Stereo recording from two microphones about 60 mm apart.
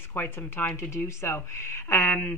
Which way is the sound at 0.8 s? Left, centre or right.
Left.